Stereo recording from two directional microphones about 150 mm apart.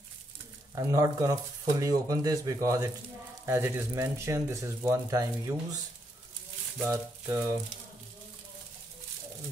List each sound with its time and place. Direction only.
0.7 s speech: 25° right (ahead or behind)
6.8 s speech: 15° right (ahead or behind)